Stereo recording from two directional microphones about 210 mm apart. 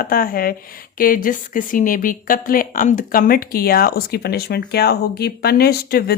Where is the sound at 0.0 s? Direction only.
45° left (ahead or behind).